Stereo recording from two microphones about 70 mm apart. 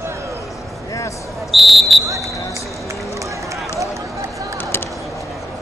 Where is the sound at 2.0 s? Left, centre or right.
Right.